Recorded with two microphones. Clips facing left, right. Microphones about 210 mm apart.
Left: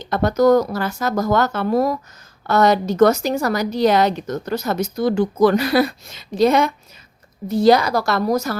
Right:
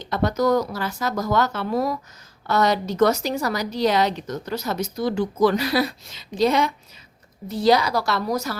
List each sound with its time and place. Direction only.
0.0 s a woman's voice: 50° left (ahead or behind)